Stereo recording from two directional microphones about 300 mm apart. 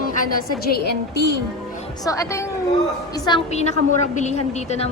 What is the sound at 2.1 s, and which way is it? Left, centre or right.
A woman's voice, centre.